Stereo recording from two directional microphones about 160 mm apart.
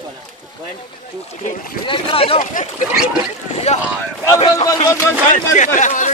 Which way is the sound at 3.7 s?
45° left (ahead or behind).